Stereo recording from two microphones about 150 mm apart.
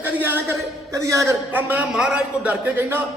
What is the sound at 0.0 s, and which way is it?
A man's voice, 10° right (ahead or behind).